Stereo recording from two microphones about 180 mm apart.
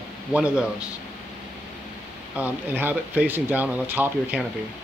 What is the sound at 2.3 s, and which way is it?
Speech, 10° right (ahead or behind).